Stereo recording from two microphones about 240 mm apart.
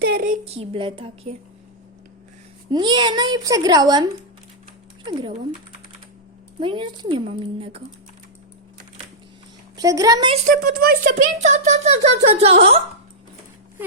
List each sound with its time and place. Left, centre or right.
0.0 s a sound: right
0.5 s a woman's voice: right
2.6 s a woman's voice: centre
6.6 s a woman's voice: right
9.7 s a woman's voice: centre